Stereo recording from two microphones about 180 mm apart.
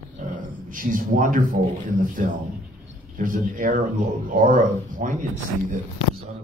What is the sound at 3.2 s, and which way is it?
A man's voice, 45° right (ahead or behind).